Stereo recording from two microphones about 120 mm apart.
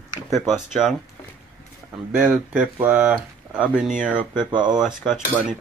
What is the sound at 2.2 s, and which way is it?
Speech, 15° right (ahead or behind).